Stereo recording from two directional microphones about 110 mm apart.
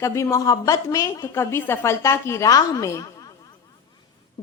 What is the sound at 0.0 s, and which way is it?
A woman's voice, 25° left (ahead or behind).